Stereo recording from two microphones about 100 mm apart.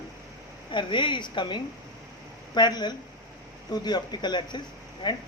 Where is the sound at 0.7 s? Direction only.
55° left (ahead or behind).